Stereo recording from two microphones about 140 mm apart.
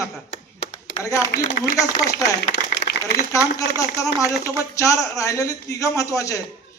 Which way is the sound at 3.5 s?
25° left (ahead or behind).